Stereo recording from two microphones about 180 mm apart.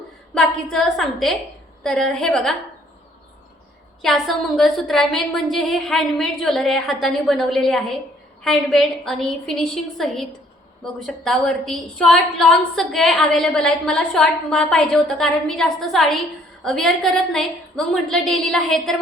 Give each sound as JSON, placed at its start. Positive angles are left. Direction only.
{"t": 0.3, "sound": "a woman's voice", "side_deg": 5}
{"t": 4.0, "sound": "a woman's voice", "side_deg": 0}